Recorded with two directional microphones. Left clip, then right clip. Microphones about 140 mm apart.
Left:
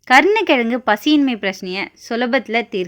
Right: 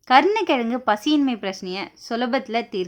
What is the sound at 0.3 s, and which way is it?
A woman's voice, 25° left (ahead or behind).